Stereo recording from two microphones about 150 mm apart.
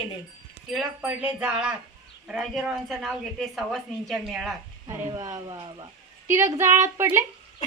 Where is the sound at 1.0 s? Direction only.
10° right (ahead or behind).